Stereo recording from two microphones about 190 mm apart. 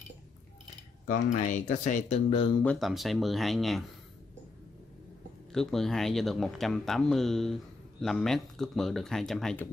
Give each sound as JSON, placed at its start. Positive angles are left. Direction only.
{"t": 1.0, "sound": "speech", "side_deg": 40}
{"t": 2.6, "sound": "speech", "side_deg": 5}
{"t": 5.5, "sound": "speech", "side_deg": 0}